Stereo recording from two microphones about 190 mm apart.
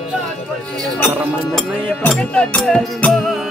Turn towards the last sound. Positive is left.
turn(degrees=0)  # may be behind; listen again after turning